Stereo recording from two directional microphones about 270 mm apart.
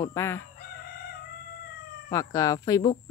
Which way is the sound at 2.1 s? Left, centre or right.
Centre.